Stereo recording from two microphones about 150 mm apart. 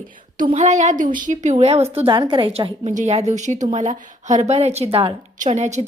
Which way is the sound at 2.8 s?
50° right (ahead or behind).